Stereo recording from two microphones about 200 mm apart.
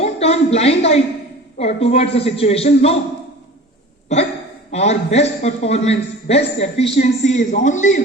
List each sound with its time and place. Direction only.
0.0 s a woman's voice: 30° left (ahead or behind)
4.7 s a man's voice: 35° left (ahead or behind)